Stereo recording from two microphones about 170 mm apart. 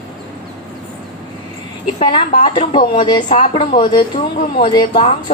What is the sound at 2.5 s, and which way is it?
A woman's voice, 30° left (ahead or behind).